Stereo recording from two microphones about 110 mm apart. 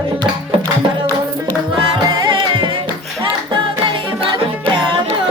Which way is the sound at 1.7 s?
40° right (ahead or behind).